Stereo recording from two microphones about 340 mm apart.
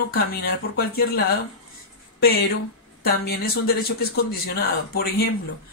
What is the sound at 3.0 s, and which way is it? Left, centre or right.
Speech, left.